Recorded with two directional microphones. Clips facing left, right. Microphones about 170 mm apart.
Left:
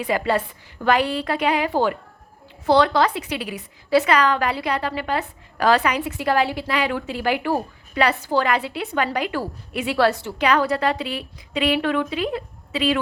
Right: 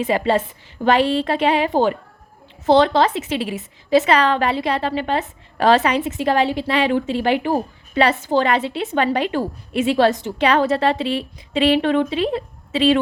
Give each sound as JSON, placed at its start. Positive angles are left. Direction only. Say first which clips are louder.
{"t": 0.0, "sound": "a woman's voice", "louder": "right 3 dB", "side_deg": -25}